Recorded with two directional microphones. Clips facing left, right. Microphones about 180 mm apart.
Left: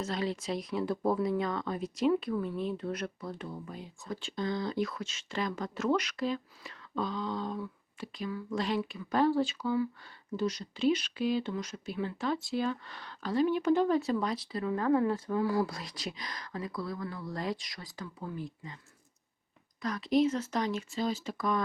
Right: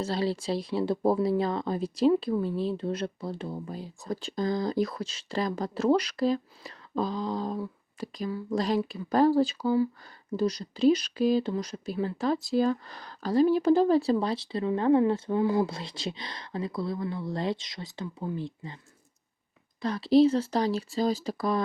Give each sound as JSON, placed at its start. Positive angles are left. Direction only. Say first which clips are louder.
{"t": 0.0, "sound": "speech", "louder": "right 5 dB", "side_deg": -30}
{"t": 19.8, "sound": "speech", "louder": "right 6 dB", "side_deg": -30}